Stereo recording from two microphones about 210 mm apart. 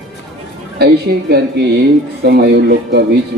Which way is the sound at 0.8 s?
50° right (ahead or behind).